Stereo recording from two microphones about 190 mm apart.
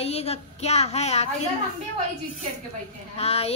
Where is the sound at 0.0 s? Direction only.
30° left (ahead or behind).